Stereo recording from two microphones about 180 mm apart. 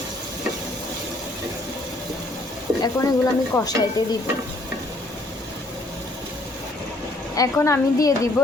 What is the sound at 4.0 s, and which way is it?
Speech, 25° left (ahead or behind).